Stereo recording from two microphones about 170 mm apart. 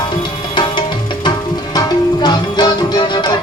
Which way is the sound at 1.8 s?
25° left (ahead or behind).